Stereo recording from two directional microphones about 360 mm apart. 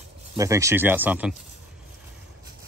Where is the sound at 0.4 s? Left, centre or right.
Centre.